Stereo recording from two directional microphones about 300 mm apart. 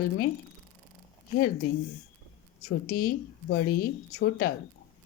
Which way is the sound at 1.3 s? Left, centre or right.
Left.